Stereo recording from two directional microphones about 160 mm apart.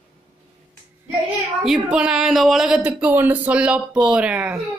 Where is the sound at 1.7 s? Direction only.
5° right (ahead or behind).